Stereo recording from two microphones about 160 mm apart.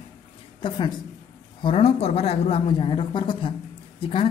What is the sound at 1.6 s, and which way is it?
Speech, 35° left (ahead or behind).